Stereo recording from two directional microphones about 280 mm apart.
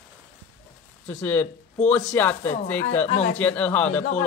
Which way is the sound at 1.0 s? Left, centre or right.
Centre.